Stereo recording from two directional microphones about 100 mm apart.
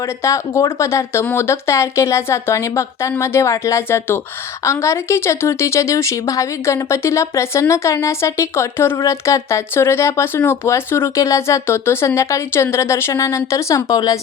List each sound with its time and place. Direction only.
0.2 s speech: 30° left (ahead or behind)